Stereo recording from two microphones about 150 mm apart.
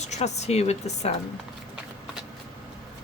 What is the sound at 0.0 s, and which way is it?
Speech, 50° left (ahead or behind).